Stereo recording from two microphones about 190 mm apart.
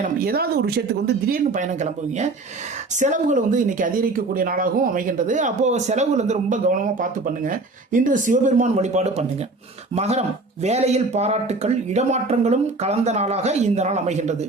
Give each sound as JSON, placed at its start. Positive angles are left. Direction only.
{"t": 0.0, "sound": "speech", "side_deg": -50}
{"t": 1.5, "sound": "speech", "side_deg": -40}